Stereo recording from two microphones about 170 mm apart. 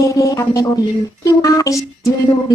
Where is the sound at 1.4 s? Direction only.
20° left (ahead or behind).